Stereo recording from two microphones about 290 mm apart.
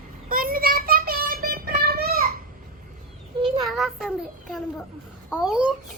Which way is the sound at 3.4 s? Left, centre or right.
Centre.